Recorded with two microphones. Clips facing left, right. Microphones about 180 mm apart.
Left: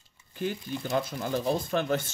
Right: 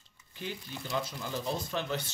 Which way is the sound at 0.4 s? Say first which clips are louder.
Left 8 dB; 50° left (ahead or behind).